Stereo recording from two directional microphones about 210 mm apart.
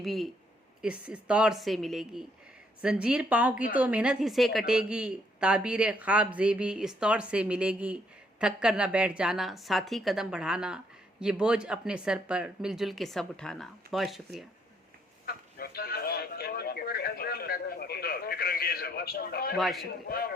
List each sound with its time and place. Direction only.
0.0 s a woman's voice: centre (ahead or behind)
15.5 s a sound: 45° left (ahead or behind)
19.5 s a woman's voice: centre (ahead or behind)
20.1 s a man's voice: 45° left (ahead or behind)